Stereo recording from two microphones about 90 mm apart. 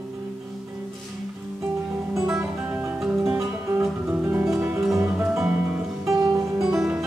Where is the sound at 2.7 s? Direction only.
20° right (ahead or behind).